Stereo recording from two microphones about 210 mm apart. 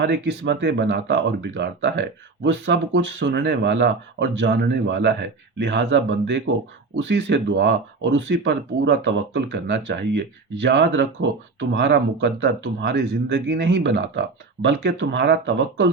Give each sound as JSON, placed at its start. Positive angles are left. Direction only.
{"t": 0.0, "sound": "speech", "side_deg": -55}